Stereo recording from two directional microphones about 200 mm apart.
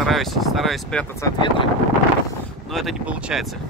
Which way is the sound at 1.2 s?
25° left (ahead or behind).